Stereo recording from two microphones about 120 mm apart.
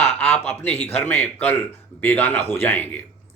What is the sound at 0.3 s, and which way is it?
Speech, 15° left (ahead or behind).